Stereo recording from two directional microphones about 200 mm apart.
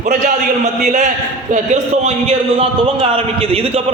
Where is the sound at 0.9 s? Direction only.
40° right (ahead or behind).